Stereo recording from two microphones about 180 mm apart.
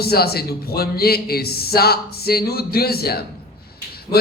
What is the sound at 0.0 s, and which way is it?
A man's voice, 60° left (ahead or behind).